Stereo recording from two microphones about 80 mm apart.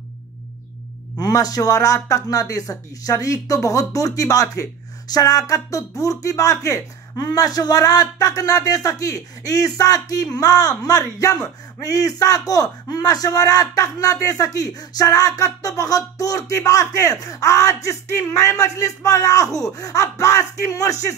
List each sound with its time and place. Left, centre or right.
1.2 s a man's voice: left